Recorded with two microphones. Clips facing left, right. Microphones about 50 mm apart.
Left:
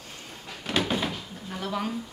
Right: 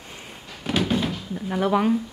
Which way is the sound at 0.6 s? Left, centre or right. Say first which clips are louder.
Right 4 dB; centre.